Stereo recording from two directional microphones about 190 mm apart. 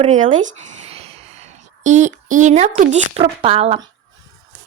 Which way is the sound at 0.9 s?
35° right (ahead or behind).